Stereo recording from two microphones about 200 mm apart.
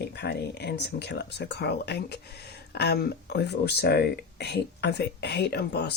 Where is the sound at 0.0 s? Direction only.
55° left (ahead or behind).